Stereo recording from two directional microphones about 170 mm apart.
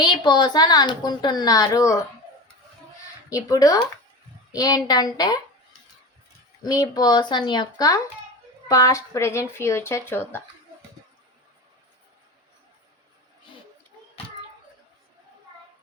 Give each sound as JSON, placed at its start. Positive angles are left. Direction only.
{"t": 0.0, "sound": "a woman's voice", "side_deg": 25}
{"t": 3.2, "sound": "a woman's voice", "side_deg": 20}
{"t": 6.6, "sound": "a woman's voice", "side_deg": 20}